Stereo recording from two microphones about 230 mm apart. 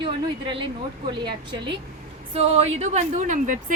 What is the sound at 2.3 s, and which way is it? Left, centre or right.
A woman's voice, right.